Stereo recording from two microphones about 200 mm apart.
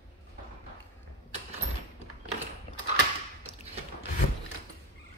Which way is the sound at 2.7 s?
25° left (ahead or behind).